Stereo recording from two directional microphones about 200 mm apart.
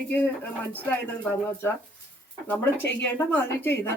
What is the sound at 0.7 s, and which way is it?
Speech, 10° left (ahead or behind).